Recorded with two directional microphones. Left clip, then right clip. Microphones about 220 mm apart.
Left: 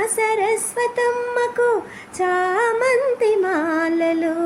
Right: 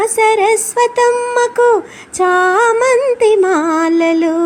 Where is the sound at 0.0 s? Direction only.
25° right (ahead or behind).